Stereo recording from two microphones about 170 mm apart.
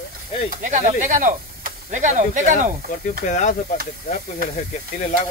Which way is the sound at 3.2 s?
45° left (ahead or behind).